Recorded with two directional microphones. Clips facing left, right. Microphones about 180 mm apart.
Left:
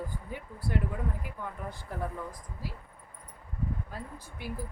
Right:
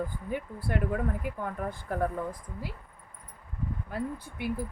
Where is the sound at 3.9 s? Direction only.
60° right (ahead or behind).